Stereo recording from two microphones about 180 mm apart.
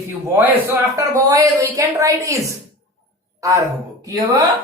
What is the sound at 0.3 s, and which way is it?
A woman's voice, 15° right (ahead or behind).